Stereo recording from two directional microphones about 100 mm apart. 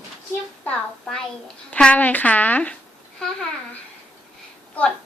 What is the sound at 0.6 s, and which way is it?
A woman's voice, 10° left (ahead or behind).